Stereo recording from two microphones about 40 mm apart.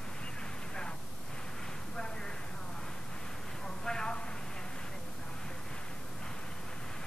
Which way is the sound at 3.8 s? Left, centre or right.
Centre.